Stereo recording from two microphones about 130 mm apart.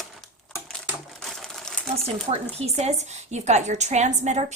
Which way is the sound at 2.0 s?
60° right (ahead or behind).